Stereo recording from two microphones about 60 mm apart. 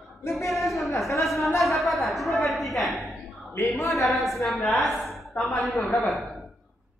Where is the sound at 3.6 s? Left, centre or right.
Left.